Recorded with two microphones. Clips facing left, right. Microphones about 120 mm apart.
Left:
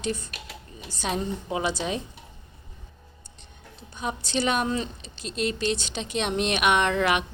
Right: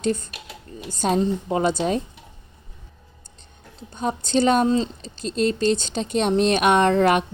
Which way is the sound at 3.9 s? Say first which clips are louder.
Right 7 dB; 45° right (ahead or behind).